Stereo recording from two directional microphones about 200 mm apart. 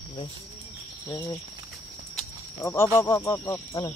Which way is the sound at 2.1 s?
15° left (ahead or behind).